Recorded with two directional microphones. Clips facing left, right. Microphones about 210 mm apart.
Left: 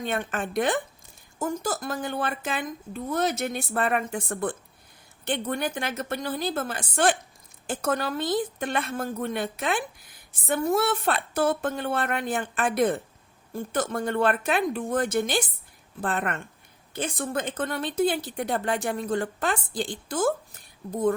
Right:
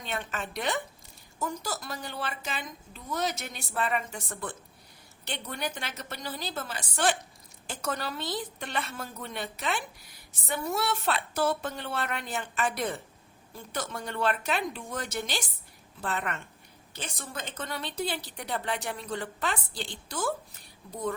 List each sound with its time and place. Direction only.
0.0 s a woman's voice: 50° left (ahead or behind)